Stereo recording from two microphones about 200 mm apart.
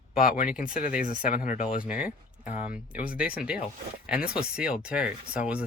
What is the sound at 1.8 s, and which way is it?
Speech, 5° right (ahead or behind).